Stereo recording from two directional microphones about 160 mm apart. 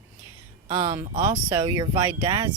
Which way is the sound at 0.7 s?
30° right (ahead or behind).